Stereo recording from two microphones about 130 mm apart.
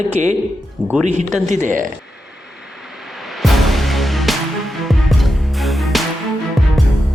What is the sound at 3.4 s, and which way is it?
Music, centre (ahead or behind).